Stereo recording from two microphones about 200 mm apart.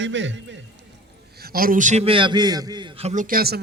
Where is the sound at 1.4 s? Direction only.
50° right (ahead or behind).